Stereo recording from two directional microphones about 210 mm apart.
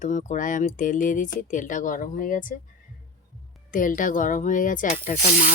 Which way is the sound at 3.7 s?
40° left (ahead or behind).